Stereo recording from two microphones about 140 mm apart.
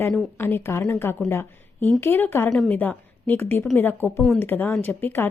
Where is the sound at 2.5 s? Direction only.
5° left (ahead or behind).